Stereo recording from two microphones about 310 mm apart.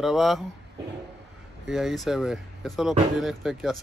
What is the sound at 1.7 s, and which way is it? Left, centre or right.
Speech, centre.